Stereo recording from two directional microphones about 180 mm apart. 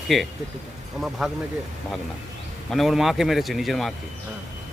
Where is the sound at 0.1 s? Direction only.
Centre (ahead or behind).